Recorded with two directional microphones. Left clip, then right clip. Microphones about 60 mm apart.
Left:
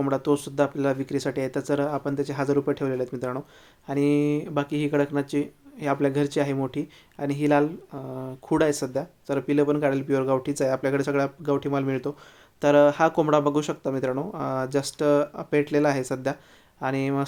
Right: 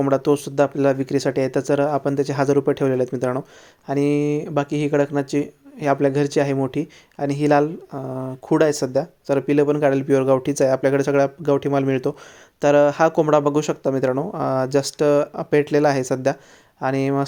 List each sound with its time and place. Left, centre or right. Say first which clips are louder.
0.1 s speech: right 6 dB; right
2.6 s speech: right 7 dB; right
3.1 s speech: right 7 dB; right
3.8 s speech: right 3 dB; centre
7.4 s speech: right 4 dB; right
8.2 s speech: right 5 dB; centre
8.6 s speech: right 6 dB; right
12.5 s speech: right 3 dB; centre
16.8 s speech: right 5 dB; centre